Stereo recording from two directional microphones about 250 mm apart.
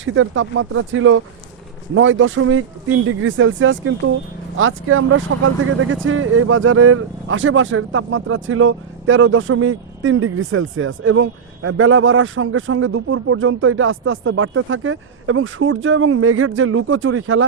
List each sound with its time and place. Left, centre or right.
0.0 s speech: right